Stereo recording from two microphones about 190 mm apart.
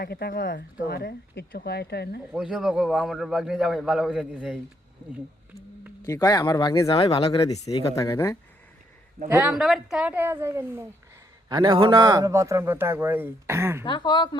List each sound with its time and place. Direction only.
0.0 s speech: 55° left (ahead or behind)
2.3 s a man's voice: 5° right (ahead or behind)
6.0 s speech: 20° left (ahead or behind)
7.7 s speech: 20° left (ahead or behind)
9.3 s a man's voice: 5° right (ahead or behind)
13.8 s speech: 25° left (ahead or behind)